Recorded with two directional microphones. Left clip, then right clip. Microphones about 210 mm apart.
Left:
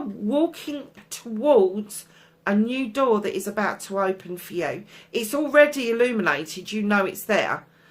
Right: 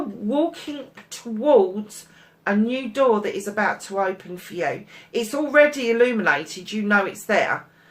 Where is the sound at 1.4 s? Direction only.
50° left (ahead or behind).